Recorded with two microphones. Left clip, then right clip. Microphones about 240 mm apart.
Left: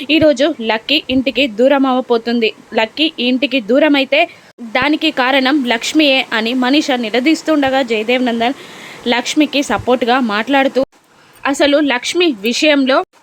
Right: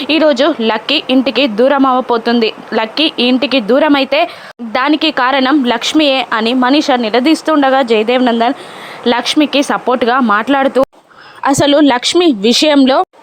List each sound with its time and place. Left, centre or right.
0.0 s speech: centre